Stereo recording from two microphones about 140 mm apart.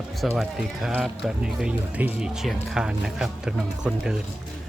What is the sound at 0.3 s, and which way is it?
Speech, 5° right (ahead or behind).